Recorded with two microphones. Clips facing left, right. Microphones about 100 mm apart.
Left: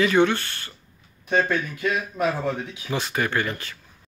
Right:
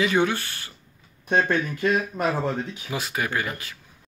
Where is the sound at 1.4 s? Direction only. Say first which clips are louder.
Right 2 dB; 45° right (ahead or behind).